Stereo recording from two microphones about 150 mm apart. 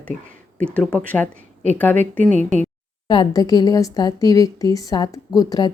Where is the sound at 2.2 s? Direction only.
55° right (ahead or behind).